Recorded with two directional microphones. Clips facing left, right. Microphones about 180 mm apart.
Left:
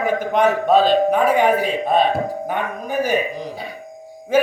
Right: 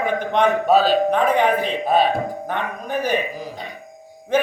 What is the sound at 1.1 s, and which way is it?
A man's voice, 5° left (ahead or behind).